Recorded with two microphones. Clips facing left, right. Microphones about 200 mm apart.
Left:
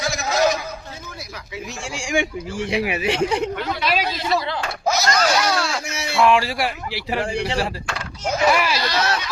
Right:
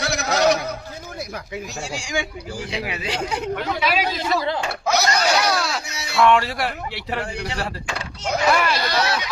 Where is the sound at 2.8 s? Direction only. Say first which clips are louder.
Left 6 dB; 25° left (ahead or behind).